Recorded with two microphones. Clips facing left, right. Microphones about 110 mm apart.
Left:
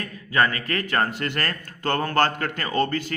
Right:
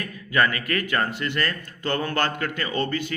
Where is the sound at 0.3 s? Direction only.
35° left (ahead or behind).